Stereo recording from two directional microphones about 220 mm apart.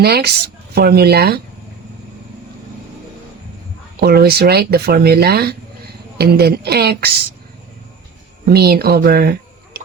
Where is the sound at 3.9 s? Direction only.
45° right (ahead or behind).